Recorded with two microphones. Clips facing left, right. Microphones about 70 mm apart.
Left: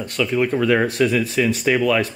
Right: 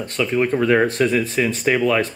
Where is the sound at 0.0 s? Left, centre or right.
Right.